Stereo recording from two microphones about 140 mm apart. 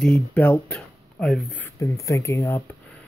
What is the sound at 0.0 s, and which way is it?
Speech, 10° left (ahead or behind).